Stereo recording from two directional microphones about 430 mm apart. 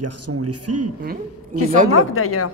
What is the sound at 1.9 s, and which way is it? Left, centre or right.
Speech, left.